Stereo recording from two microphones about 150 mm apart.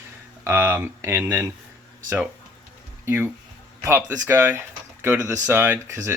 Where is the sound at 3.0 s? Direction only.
15° right (ahead or behind).